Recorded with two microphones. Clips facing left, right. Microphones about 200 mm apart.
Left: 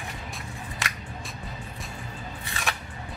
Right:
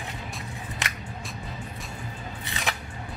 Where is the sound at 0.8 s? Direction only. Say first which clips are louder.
Even; 20° right (ahead or behind).